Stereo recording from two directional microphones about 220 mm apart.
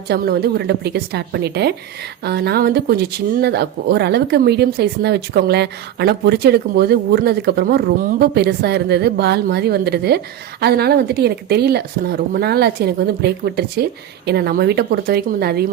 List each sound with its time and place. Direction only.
0.1 s speech: 45° right (ahead or behind)